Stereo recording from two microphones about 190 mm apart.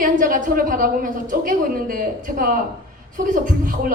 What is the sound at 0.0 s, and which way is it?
A woman's voice, 45° right (ahead or behind).